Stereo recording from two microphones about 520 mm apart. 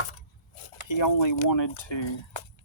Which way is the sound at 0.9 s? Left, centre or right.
Left.